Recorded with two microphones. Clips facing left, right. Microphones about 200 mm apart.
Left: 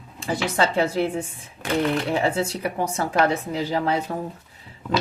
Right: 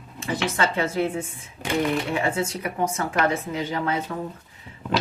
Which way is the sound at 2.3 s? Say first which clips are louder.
Left 2 dB; 35° left (ahead or behind).